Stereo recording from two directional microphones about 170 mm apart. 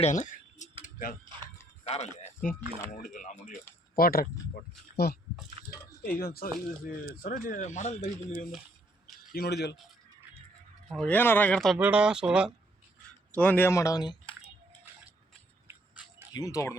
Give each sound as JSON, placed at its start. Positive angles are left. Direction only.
{"t": 0.0, "sound": "a sound", "side_deg": 45}
{"t": 1.8, "sound": "speech", "side_deg": 40}
{"t": 9.3, "sound": "speech", "side_deg": 70}
{"t": 10.8, "sound": "speech", "side_deg": 5}
{"t": 11.8, "sound": "speech", "side_deg": -10}
{"t": 13.3, "sound": "speech", "side_deg": 10}
{"t": 16.3, "sound": "speech", "side_deg": 20}